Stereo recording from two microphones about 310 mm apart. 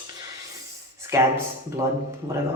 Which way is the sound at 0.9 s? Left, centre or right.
Centre.